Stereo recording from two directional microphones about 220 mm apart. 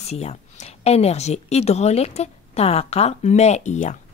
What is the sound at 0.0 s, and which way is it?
A woman's voice, 30° left (ahead or behind).